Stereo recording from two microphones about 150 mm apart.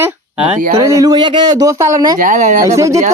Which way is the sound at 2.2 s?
55° right (ahead or behind).